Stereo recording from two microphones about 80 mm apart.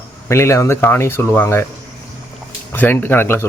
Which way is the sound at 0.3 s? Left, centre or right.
Left.